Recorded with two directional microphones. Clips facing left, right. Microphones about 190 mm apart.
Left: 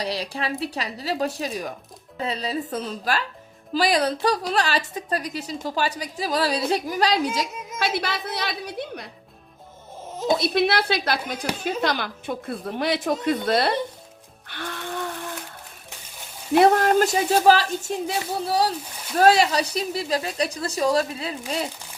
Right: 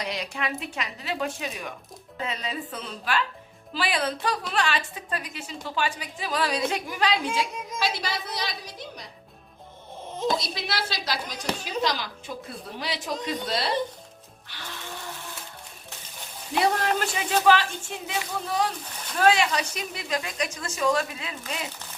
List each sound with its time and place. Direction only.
0.0 s a woman's voice: 35° left (ahead or behind)
7.8 s a woman's voice: 55° left (ahead or behind)
10.3 s a woman's voice: 60° left (ahead or behind)
14.5 s a sound: 55° left (ahead or behind)
16.6 s a woman's voice: 50° left (ahead or behind); by 21.7 s 35° left (ahead or behind)